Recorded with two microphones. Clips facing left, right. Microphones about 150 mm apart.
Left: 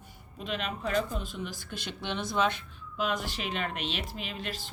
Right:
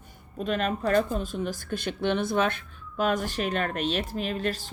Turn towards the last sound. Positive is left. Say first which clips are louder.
# right 9 dB
turn(degrees=-45)  # may be behind; listen again after turning